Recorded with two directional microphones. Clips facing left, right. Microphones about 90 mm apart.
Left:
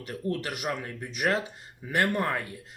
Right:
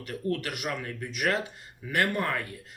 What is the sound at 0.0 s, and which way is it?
Speech, 25° left (ahead or behind).